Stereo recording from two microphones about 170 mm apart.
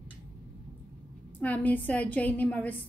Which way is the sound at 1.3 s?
10° left (ahead or behind).